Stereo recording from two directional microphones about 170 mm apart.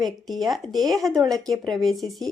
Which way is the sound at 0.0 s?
Centre (ahead or behind).